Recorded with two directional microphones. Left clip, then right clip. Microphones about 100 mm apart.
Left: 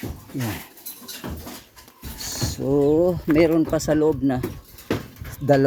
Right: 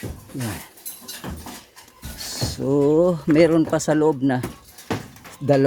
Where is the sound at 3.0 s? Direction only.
45° right (ahead or behind).